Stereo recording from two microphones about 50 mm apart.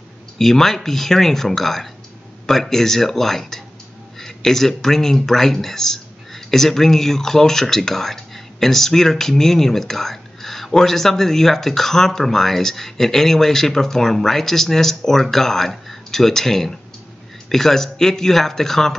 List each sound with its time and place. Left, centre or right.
0.4 s speech: centre